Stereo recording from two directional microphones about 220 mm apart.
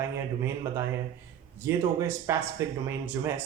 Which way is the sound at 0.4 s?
10° right (ahead or behind).